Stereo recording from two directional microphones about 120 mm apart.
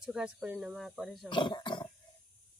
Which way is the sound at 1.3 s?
40° left (ahead or behind).